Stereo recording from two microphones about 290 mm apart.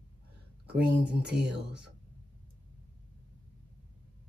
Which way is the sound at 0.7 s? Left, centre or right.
Centre.